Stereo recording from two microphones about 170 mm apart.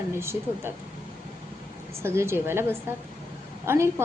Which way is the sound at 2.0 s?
15° right (ahead or behind).